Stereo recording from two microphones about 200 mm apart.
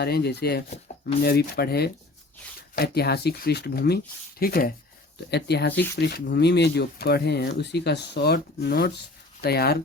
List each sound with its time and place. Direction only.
0.0 s speech: 55° left (ahead or behind)